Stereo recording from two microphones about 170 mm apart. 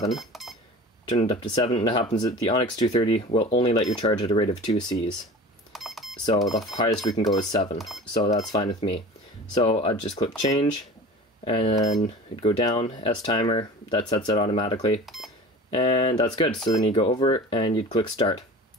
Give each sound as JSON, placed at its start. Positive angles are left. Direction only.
{"t": 0.1, "sound": "speech", "side_deg": 0}
{"t": 1.0, "sound": "speech", "side_deg": 30}
{"t": 2.0, "sound": "speech", "side_deg": 20}
{"t": 5.7, "sound": "a sound", "side_deg": 0}
{"t": 6.6, "sound": "speech", "side_deg": 25}
{"t": 7.3, "sound": "speech", "side_deg": 35}
{"t": 7.7, "sound": "speech", "side_deg": 0}
{"t": 8.2, "sound": "speech", "side_deg": 40}
{"t": 10.1, "sound": "speech", "side_deg": 25}
{"t": 11.9, "sound": "speech", "side_deg": 40}
{"t": 15.0, "sound": "speech", "side_deg": 0}
{"t": 15.7, "sound": "speech", "side_deg": 30}